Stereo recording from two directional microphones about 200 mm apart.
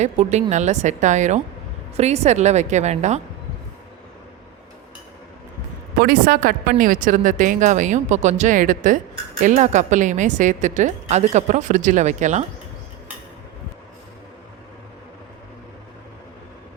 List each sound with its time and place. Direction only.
0.0 s a woman's voice: 35° right (ahead or behind)
6.0 s a woman's voice: 50° right (ahead or behind)